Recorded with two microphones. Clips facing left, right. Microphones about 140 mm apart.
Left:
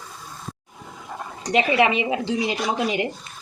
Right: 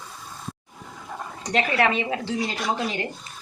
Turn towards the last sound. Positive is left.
turn(degrees=15)  # may be behind; listen again after turning